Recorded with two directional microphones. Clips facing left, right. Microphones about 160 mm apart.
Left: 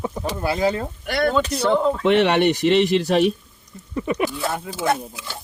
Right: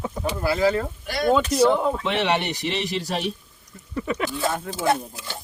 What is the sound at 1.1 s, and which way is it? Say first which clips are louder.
Speech: left 1 dB; 65° left (ahead or behind).